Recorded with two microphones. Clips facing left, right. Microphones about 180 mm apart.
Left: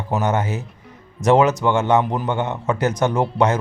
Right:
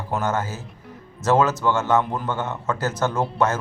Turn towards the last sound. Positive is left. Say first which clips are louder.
# left 4 dB
turn(degrees=15)  # may be behind; listen again after turning